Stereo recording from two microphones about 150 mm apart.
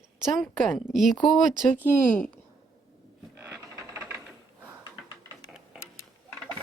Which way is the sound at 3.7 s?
20° right (ahead or behind).